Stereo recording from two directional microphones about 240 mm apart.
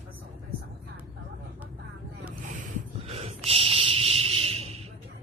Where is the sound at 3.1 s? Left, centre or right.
Right.